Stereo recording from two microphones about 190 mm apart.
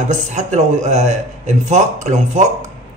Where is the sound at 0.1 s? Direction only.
40° right (ahead or behind).